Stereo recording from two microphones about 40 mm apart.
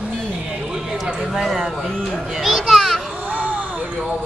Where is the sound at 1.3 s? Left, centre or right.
Centre.